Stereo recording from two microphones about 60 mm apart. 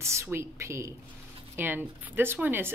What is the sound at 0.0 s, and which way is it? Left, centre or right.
Speech, right.